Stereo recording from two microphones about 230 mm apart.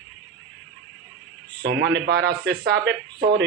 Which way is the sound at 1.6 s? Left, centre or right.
Right.